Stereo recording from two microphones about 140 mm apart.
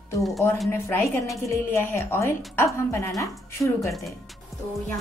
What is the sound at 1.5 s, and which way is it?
A woman's voice, 20° left (ahead or behind).